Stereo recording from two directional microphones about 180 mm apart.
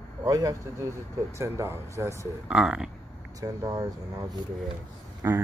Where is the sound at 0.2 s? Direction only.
20° right (ahead or behind).